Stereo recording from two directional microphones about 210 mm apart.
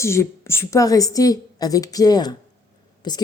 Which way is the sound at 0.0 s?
15° left (ahead or behind).